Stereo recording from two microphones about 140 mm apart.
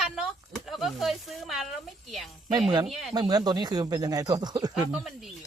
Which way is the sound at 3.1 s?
30° right (ahead or behind).